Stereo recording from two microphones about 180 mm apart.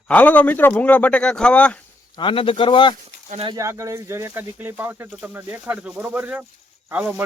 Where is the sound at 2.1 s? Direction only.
30° left (ahead or behind).